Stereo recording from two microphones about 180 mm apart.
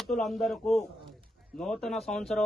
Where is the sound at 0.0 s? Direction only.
Centre (ahead or behind).